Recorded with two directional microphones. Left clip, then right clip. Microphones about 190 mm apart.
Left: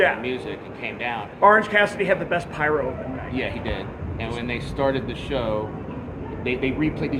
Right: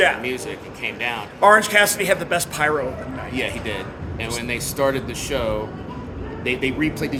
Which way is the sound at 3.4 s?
10° right (ahead or behind).